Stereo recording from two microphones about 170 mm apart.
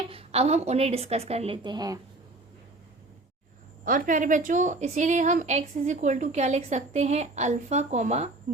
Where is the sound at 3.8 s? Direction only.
50° right (ahead or behind).